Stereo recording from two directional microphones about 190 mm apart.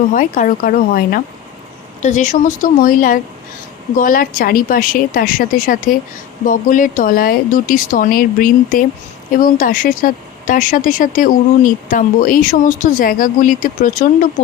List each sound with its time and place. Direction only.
0.1 s speech: 45° left (ahead or behind)